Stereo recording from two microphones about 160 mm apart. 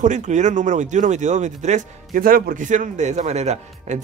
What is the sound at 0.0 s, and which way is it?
Speech, 50° right (ahead or behind).